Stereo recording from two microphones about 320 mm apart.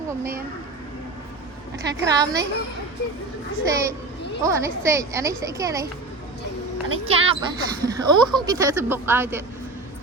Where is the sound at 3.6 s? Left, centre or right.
Centre.